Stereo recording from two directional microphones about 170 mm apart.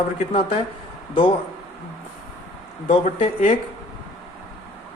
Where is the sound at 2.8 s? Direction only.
35° left (ahead or behind).